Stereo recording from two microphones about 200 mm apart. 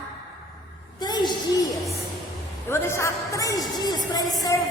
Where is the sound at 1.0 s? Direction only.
20° left (ahead or behind).